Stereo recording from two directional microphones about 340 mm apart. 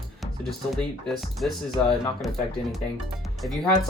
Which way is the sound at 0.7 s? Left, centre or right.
Centre.